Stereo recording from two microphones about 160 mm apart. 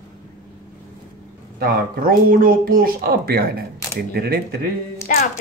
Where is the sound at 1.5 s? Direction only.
65° right (ahead or behind).